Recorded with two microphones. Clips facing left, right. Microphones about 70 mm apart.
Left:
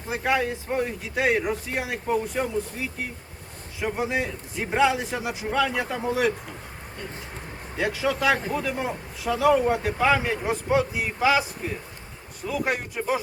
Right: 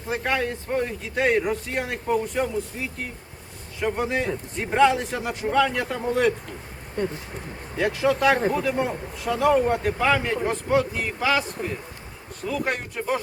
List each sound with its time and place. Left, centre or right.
0.1 s speech: centre
7.8 s speech: centre
12.5 s speech: centre